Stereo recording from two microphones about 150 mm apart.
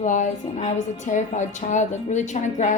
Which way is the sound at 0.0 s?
55° left (ahead or behind).